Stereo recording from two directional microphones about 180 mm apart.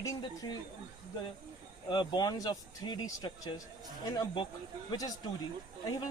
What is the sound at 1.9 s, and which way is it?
Speech, 25° left (ahead or behind).